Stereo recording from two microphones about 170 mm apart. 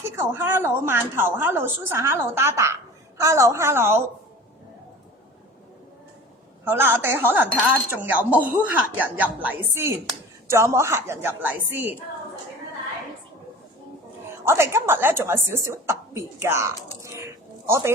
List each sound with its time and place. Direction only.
0.3 s a woman's voice: 15° right (ahead or behind)
6.7 s a woman's voice: 10° right (ahead or behind)
14.4 s a woman's voice: 15° right (ahead or behind)
17.0 s a sound: 15° right (ahead or behind)